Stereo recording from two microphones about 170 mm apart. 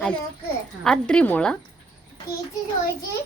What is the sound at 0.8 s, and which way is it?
Speech, 5° left (ahead or behind).